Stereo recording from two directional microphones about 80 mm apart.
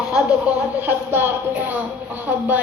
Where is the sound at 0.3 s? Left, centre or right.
Centre.